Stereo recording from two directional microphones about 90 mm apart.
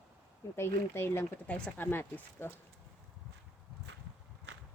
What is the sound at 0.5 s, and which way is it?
Speech, 25° left (ahead or behind).